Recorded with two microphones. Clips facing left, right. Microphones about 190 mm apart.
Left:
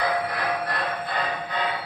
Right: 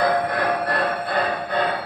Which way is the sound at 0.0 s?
60° right (ahead or behind).